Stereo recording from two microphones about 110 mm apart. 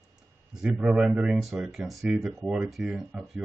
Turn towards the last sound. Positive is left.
turn(degrees=-5)  # may be behind; listen again after turning